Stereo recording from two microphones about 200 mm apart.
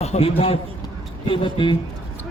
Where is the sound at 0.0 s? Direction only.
30° left (ahead or behind).